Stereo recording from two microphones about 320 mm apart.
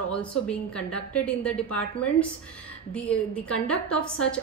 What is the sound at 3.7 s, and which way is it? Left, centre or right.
Speech, centre.